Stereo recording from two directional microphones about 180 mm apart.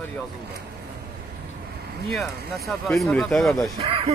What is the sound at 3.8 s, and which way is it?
Speech, 30° right (ahead or behind).